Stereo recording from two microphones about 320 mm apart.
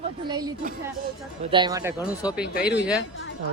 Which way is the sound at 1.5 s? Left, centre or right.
Centre.